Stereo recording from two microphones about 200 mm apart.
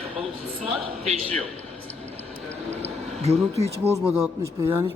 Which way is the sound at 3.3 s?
30° right (ahead or behind).